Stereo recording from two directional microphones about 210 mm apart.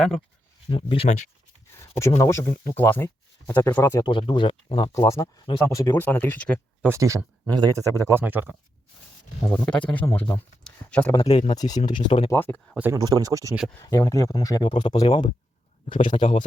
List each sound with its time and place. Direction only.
0.7 s speech: 25° left (ahead or behind)
1.7 s speech: 15° left (ahead or behind)
6.8 s speech: 15° right (ahead or behind)
9.5 s speech: 5° left (ahead or behind)
11.1 s speech: 25° left (ahead or behind)
11.5 s speech: 20° left (ahead or behind)
12.0 s speech: 30° left (ahead or behind)
12.3 s speech: 10° left (ahead or behind)
12.7 s speech: 10° right (ahead or behind)
13.8 s speech: 15° left (ahead or behind)